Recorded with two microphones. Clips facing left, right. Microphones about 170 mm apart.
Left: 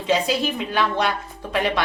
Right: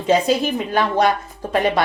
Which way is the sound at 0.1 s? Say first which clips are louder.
Right 4 dB; 45° right (ahead or behind).